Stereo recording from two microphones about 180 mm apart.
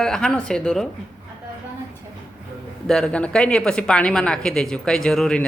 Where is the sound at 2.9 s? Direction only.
5° left (ahead or behind).